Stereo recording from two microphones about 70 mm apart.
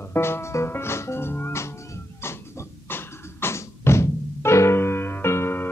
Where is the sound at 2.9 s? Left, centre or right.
Left.